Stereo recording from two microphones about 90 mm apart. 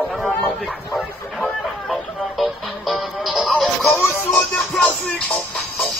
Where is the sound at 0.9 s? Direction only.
5° left (ahead or behind).